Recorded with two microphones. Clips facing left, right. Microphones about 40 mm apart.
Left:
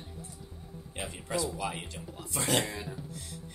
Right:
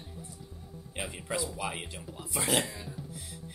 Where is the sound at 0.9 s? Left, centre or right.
Centre.